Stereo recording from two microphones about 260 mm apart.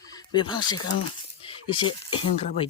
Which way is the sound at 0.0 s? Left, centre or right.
Centre.